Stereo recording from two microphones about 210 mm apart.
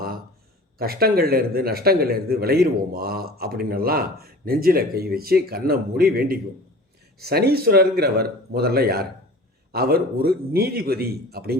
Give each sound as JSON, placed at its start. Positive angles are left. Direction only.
{"t": 0.8, "sound": "a man's voice", "side_deg": -45}